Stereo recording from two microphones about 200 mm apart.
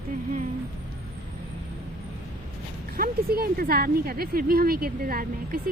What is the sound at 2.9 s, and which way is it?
Speech, 50° right (ahead or behind).